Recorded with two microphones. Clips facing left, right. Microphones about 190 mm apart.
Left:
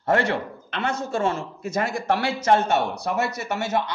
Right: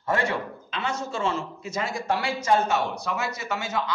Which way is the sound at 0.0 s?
65° left (ahead or behind).